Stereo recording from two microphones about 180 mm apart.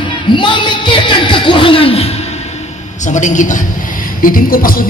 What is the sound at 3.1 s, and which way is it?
Speech, 45° left (ahead or behind).